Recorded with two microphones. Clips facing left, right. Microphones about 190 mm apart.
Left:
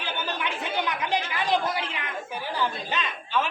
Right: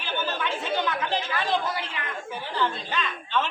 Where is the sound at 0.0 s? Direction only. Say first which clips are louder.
Right 2 dB; 15° left (ahead or behind).